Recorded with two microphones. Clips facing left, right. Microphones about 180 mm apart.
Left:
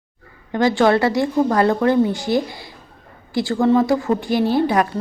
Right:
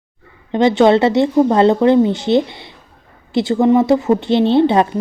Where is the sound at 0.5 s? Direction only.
20° right (ahead or behind).